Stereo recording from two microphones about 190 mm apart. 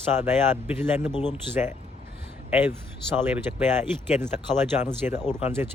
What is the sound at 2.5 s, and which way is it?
Speech, 10° right (ahead or behind).